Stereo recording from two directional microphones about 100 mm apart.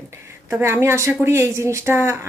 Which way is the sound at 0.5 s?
25° right (ahead or behind).